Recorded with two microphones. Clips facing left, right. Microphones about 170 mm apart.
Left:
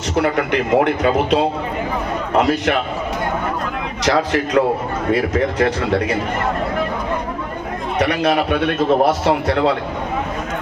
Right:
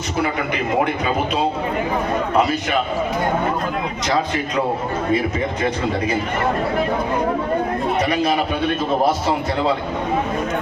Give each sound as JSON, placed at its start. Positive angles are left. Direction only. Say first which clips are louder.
{"t": 0.2, "sound": "a man's voice", "louder": "left 5 dB", "side_deg": 75}
{"t": 4.0, "sound": "speech", "louder": "left 5 dB", "side_deg": 75}
{"t": 7.9, "sound": "speech", "louder": "left 4 dB", "side_deg": 75}